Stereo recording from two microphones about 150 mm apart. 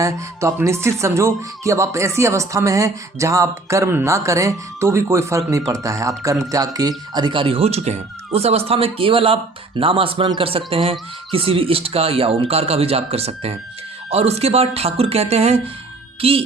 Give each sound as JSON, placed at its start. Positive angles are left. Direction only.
{"t": 0.0, "sound": "speech", "side_deg": -20}